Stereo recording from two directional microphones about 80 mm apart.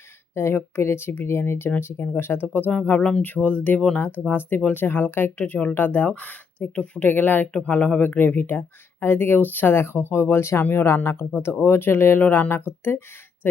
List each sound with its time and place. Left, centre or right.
0.3 s speech: left
3.8 s speech: centre
4.3 s speech: left